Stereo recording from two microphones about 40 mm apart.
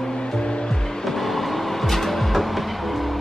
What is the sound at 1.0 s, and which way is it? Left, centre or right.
Vehicle, centre.